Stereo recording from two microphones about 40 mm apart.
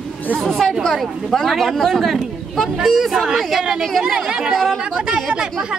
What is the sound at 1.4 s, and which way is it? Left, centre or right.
Speech, centre.